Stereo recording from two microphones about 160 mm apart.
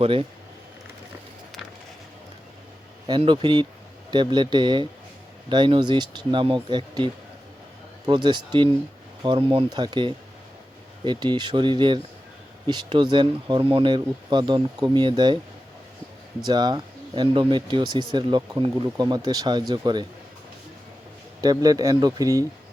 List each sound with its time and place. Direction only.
0.0 s speech: 35° right (ahead or behind)
3.1 s speech: 30° right (ahead or behind)
9.5 s speech: 30° right (ahead or behind)
16.4 s speech: 25° right (ahead or behind)
21.4 s speech: 25° right (ahead or behind)